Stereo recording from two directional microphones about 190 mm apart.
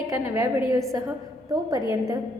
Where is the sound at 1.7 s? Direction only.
20° right (ahead or behind).